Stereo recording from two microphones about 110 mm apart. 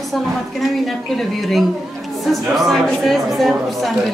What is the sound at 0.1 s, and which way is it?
A woman's voice, centre (ahead or behind).